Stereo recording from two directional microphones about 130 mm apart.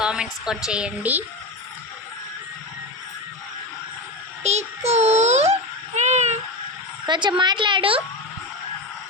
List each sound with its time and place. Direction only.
0.0 s a woman's voice: 5° right (ahead or behind)
4.4 s a sound: 55° right (ahead or behind)
7.0 s a woman's voice: 35° right (ahead or behind)